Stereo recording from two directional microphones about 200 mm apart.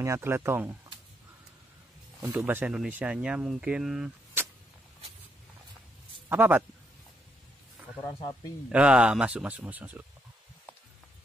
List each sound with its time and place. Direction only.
0.0 s speech: 15° right (ahead or behind)
2.3 s speech: 10° right (ahead or behind)
6.2 s a man's voice: 10° right (ahead or behind)
8.0 s speech: 25° left (ahead or behind)
8.7 s speech: 5° right (ahead or behind)